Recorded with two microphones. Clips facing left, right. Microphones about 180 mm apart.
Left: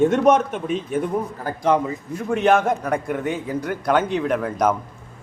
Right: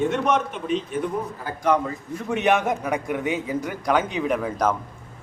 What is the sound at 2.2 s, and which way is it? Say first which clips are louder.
A man's voice: left 3 dB; centre (ahead or behind).